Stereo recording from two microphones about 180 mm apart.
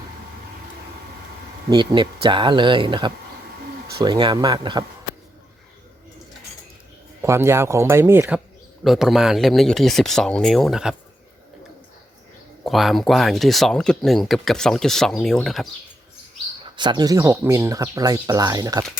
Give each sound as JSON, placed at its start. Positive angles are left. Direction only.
{"t": 1.7, "sound": "speech", "side_deg": -25}
{"t": 7.2, "sound": "speech", "side_deg": -15}
{"t": 8.8, "sound": "speech", "side_deg": 0}
{"t": 12.6, "sound": "speech", "side_deg": 0}
{"t": 16.7, "sound": "speech", "side_deg": -25}